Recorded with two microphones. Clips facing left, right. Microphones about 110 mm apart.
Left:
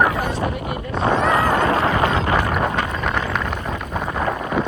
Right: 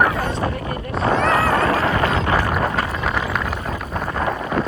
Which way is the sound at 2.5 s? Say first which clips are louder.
Even; centre (ahead or behind).